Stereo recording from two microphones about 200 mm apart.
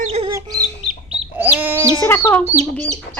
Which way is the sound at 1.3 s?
10° right (ahead or behind).